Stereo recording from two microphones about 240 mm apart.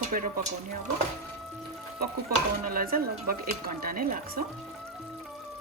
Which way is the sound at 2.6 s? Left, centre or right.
Right.